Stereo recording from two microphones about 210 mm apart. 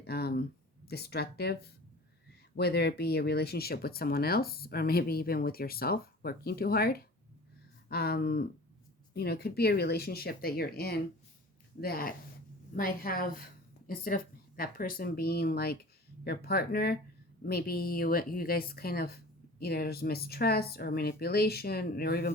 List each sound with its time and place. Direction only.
0.0 s a sound: 50° left (ahead or behind)
0.9 s speech: 50° left (ahead or behind)
2.6 s speech: 50° left (ahead or behind)